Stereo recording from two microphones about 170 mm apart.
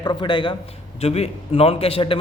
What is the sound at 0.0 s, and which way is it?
A man's voice, 25° left (ahead or behind).